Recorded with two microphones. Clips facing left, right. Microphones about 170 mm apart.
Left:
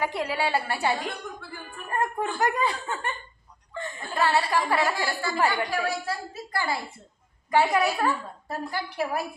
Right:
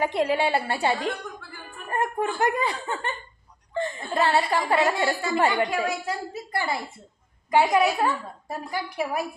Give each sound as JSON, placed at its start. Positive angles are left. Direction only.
{"t": 0.0, "sound": "a woman's voice", "side_deg": -25}